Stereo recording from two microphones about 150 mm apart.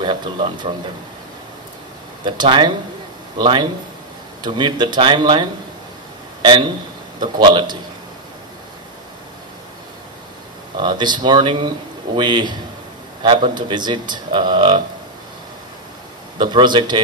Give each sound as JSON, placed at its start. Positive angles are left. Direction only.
{"t": 0.0, "sound": "a man's voice", "side_deg": -30}
{"t": 2.2, "sound": "a man's voice", "side_deg": -30}
{"t": 7.2, "sound": "speech", "side_deg": -30}
{"t": 10.8, "sound": "a man's voice", "side_deg": -30}
{"t": 16.3, "sound": "speech", "side_deg": -30}